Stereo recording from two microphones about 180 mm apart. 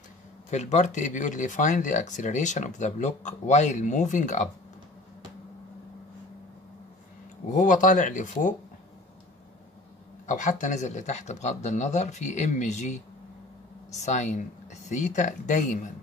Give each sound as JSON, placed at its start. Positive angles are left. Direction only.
{"t": 0.5, "sound": "speech", "side_deg": 40}
{"t": 7.5, "sound": "speech", "side_deg": 45}
{"t": 10.2, "sound": "speech", "side_deg": 45}